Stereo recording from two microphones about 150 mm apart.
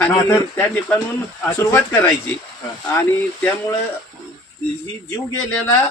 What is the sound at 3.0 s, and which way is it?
Speech, 15° left (ahead or behind).